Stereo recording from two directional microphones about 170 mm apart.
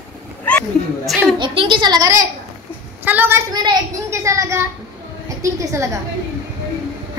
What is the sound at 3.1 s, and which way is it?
A child's voice, 10° right (ahead or behind).